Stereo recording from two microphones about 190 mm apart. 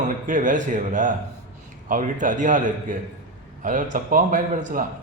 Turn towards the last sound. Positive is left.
turn(degrees=-45)  # may be behind; listen again after turning